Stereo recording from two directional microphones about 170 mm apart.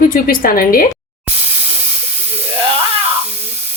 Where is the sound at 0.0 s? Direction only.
55° left (ahead or behind).